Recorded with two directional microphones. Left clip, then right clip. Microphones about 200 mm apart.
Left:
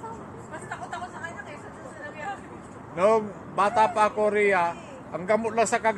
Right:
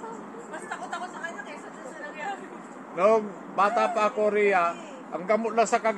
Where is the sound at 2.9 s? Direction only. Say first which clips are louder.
Even; 50° left (ahead or behind).